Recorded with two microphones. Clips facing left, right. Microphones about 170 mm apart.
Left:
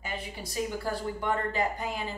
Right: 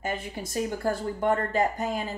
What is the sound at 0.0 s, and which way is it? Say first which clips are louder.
Speech: right 5 dB; 45° right (ahead or behind).